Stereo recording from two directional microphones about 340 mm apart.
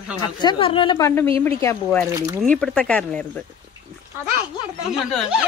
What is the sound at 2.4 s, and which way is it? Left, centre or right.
Speech, centre.